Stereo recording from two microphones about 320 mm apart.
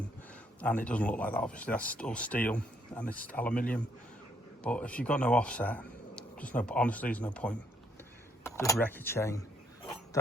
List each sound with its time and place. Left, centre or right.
0.6 s speech: centre
4.6 s speech: centre